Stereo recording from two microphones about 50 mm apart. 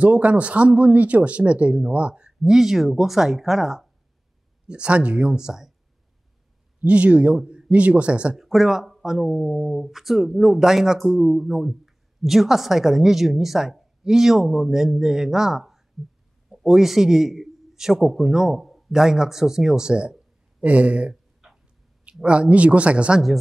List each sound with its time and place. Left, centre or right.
0.0 s speech: right
2.4 s a woman's voice: centre
4.6 s speech: right
5.4 s a woman's voice: centre
6.9 s speech: right
7.3 s speech: centre
8.4 s a woman's voice: centre; by 21.2 s right
21.4 s a sound: centre
22.2 s speech: right